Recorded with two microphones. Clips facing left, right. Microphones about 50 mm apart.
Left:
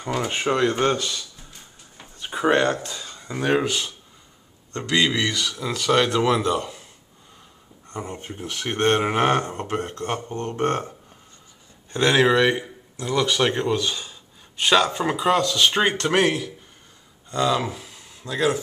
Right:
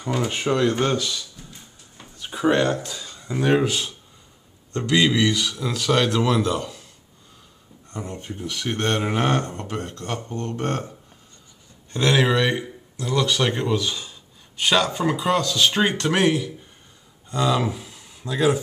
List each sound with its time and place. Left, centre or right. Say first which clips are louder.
0.1 s speech: even; centre
1.5 s a sound: even; centre
2.2 s speech: even; centre
7.9 s speech: even; centre
11.9 s speech: left 2 dB; centre